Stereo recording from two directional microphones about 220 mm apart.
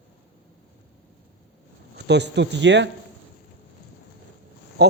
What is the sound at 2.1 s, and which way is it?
Speech, 50° right (ahead or behind).